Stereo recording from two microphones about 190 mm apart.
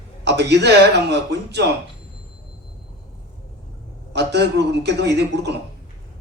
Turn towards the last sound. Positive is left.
turn(degrees=-60)  # may be behind; listen again after turning